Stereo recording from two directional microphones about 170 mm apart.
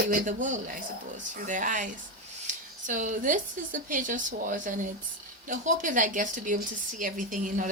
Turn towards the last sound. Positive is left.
turn(degrees=-50)  # may be behind; listen again after turning